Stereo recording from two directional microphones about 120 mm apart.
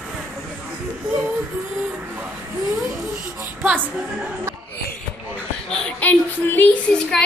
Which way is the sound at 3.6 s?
15° right (ahead or behind).